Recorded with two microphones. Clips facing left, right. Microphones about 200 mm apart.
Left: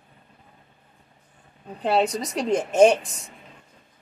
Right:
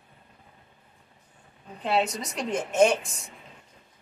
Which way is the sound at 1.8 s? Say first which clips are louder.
Left 4 dB; 40° left (ahead or behind).